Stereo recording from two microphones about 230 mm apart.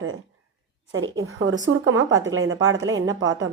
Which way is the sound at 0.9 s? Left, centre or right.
Right.